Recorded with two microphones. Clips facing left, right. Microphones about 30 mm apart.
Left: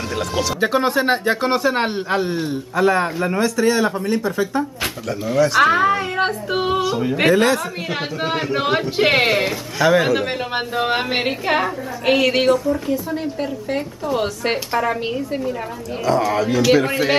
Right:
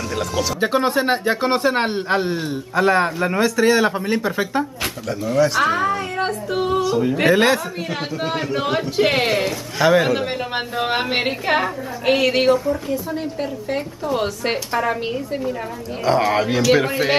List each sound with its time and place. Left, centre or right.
0.4 s a woman's voice: centre
3.8 s speech: centre
5.5 s speech: centre
6.8 s speech: centre
7.3 s a man's voice: centre
8.2 s speech: centre
9.8 s a woman's voice: centre
16.1 s speech: right
16.7 s a man's voice: centre